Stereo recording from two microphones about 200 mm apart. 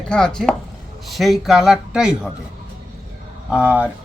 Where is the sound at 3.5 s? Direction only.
5° right (ahead or behind).